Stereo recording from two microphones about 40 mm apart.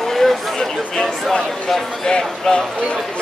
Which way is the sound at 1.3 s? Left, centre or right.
Centre.